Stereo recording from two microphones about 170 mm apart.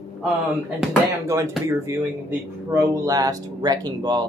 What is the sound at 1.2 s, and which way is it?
Speech, 15° right (ahead or behind).